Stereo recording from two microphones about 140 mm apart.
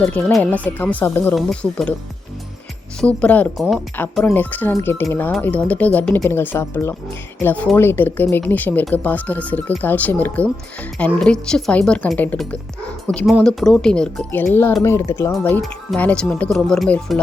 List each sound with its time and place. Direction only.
0.0 s speech: 15° left (ahead or behind)
1.4 s speech: centre (ahead or behind)
3.0 s speech: 10° left (ahead or behind)
14.5 s speech: 20° left (ahead or behind); by 17.2 s centre (ahead or behind)